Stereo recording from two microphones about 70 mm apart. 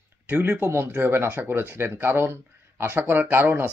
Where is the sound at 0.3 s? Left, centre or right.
Right.